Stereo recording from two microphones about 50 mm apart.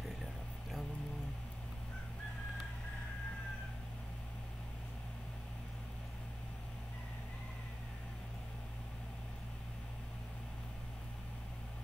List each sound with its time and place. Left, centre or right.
0.0 s vehicle: centre